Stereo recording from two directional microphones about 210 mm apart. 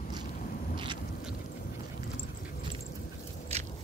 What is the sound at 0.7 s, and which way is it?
Boat, 25° right (ahead or behind).